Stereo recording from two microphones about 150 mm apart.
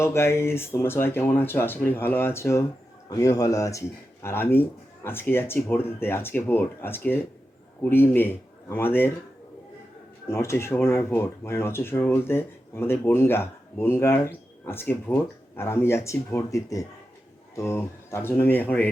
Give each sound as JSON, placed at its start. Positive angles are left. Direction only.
{"t": 0.0, "sound": "speech", "side_deg": 20}
{"t": 10.2, "sound": "speech", "side_deg": 20}